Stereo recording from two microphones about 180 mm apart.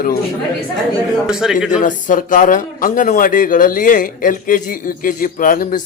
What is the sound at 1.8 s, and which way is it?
Speech, 45° left (ahead or behind).